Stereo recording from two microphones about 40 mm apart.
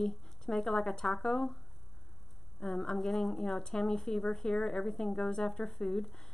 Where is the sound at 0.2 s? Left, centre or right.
Centre.